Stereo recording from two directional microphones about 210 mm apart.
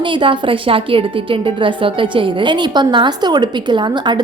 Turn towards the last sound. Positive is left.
turn(degrees=-20)  # may be behind; listen again after turning